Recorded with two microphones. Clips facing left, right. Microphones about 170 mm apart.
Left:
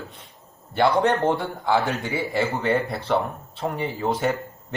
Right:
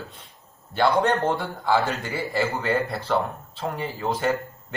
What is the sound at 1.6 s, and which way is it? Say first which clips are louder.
A man's voice: right 1 dB; 20° left (ahead or behind).